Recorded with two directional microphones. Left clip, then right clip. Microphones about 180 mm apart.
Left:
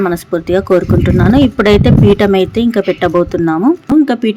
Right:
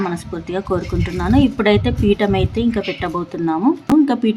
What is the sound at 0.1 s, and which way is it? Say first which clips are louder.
Speech: left 11 dB; 30° left (ahead or behind).